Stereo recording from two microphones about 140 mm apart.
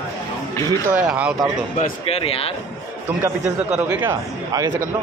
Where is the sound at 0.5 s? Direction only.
20° left (ahead or behind).